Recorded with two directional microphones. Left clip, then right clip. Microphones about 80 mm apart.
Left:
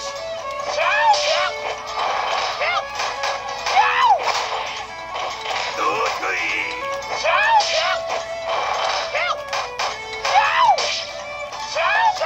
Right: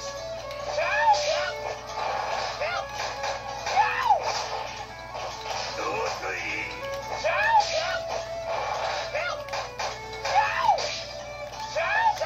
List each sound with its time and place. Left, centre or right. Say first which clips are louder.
0.7 s music: left 6 dB; left
5.8 s music: left 9 dB; left
11.7 s music: left 7 dB; centre